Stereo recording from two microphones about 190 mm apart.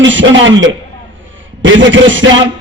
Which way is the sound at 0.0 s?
80° right.